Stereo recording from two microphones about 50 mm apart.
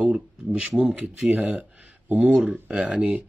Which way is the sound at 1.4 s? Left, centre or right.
Right.